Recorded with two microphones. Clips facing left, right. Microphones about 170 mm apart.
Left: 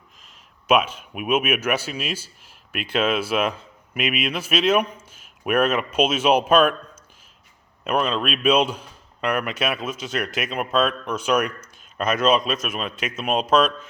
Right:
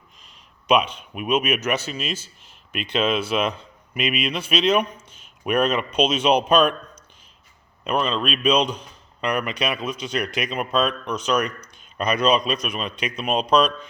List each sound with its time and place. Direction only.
0.2 s a man's voice: 5° left (ahead or behind)